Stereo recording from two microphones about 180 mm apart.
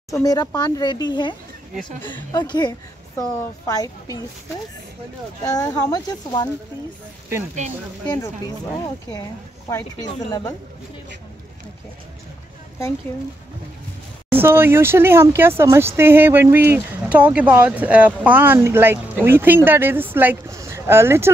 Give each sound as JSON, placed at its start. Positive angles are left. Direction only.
{"t": 0.1, "sound": "speech", "side_deg": 20}
{"t": 5.4, "sound": "speech", "side_deg": 20}
{"t": 8.1, "sound": "speech", "side_deg": 20}
{"t": 14.3, "sound": "speech", "side_deg": -10}